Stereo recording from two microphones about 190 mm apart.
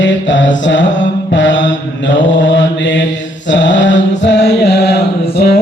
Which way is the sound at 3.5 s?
70° left (ahead or behind).